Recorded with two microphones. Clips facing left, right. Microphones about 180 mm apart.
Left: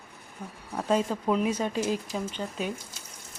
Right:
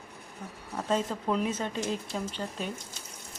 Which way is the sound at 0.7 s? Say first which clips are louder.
Left 3 dB; 10° left (ahead or behind).